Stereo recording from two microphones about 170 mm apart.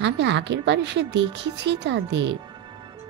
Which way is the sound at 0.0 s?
90° right.